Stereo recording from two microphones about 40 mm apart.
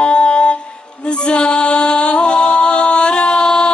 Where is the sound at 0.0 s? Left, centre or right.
Left.